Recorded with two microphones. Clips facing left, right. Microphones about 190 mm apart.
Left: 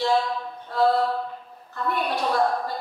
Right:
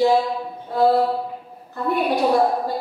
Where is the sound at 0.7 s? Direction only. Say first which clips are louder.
Right 4 dB; 10° right (ahead or behind).